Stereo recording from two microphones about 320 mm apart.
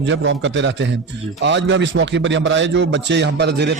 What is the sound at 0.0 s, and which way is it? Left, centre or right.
Speech, right.